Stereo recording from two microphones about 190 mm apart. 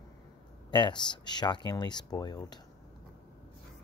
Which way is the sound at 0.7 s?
25° left (ahead or behind).